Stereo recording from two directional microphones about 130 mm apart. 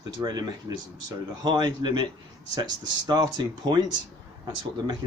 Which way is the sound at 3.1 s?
30° right (ahead or behind).